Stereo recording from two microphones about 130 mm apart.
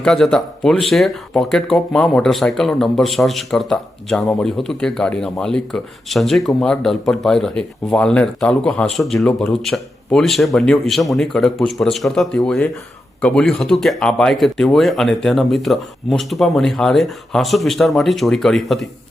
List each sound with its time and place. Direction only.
0.0 s speech: 5° left (ahead or behind)